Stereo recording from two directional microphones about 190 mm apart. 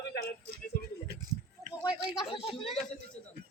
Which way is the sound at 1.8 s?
25° left (ahead or behind).